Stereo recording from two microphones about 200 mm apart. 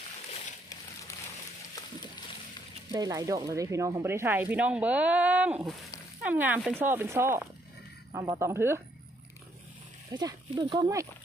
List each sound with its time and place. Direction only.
2.9 s speech: 20° right (ahead or behind)
10.1 s speech: 20° right (ahead or behind)